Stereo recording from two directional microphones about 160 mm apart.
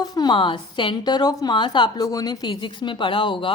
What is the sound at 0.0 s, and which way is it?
A woman's voice, 25° left (ahead or behind).